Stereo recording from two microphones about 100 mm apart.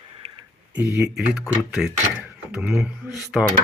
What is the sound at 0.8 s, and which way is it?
Speech, 30° right (ahead or behind).